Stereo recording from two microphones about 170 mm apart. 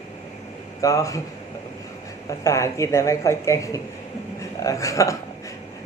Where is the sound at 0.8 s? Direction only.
20° left (ahead or behind).